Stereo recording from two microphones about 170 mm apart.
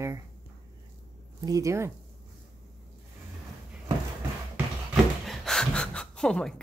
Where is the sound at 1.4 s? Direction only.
20° right (ahead or behind).